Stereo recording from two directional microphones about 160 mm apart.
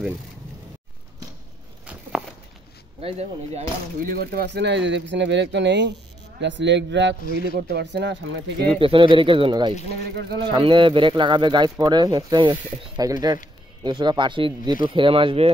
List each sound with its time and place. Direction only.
3.0 s speech: 40° right (ahead or behind)
4.0 s a man's voice: 65° right (ahead or behind); by 8.6 s 90° right
8.7 s speech: 35° right (ahead or behind)
10.1 s a man's voice: 90° right
10.5 s speech: 30° right (ahead or behind)